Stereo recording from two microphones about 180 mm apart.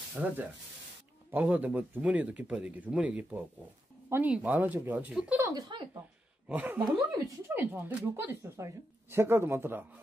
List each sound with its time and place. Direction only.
0.2 s speech: 5° right (ahead or behind)
5.5 s speech: 25° right (ahead or behind)
6.4 s speech: 10° right (ahead or behind)